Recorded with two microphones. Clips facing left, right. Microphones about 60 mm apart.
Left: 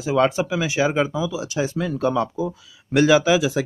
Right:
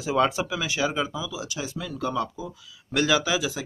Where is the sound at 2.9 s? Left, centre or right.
Left.